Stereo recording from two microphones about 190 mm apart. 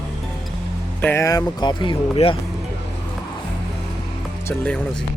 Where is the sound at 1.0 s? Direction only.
15° left (ahead or behind).